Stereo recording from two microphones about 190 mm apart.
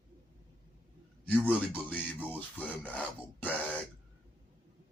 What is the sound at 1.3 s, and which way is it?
Rub, 10° left (ahead or behind).